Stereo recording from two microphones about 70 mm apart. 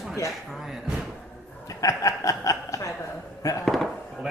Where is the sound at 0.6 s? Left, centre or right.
Centre.